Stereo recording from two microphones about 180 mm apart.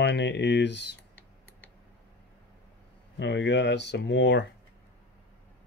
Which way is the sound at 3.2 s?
75° left (ahead or behind).